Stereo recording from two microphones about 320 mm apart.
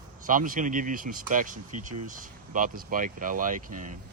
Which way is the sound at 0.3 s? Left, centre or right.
Right.